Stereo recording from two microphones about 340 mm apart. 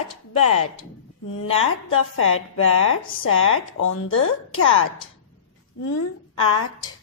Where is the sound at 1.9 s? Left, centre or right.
Left.